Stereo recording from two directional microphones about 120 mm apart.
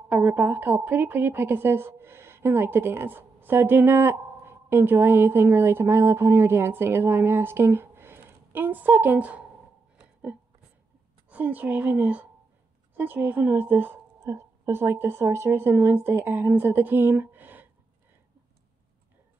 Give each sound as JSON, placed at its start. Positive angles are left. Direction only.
{"t": 0.1, "sound": "a woman's voice", "side_deg": -15}
{"t": 11.2, "sound": "a woman's voice", "side_deg": -15}